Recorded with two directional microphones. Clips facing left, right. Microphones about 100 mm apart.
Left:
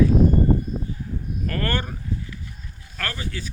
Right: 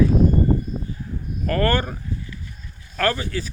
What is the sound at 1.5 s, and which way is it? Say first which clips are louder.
Speech: right 7 dB; 40° right (ahead or behind).